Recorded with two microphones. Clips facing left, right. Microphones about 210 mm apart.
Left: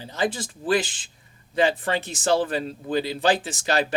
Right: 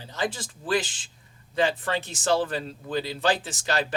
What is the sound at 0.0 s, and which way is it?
A man's voice, 15° left (ahead or behind).